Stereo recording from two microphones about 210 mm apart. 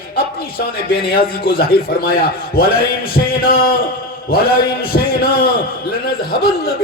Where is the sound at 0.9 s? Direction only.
45° left (ahead or behind).